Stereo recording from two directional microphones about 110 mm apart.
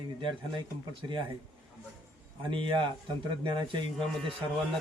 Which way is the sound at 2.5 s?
45° right (ahead or behind).